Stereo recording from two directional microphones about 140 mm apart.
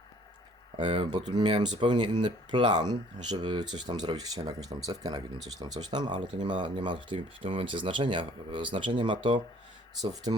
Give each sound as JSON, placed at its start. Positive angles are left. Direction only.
{"t": 0.8, "sound": "speech", "side_deg": -35}